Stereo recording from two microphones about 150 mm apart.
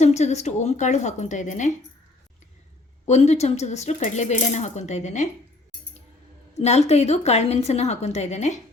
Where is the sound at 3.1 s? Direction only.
45° left (ahead or behind).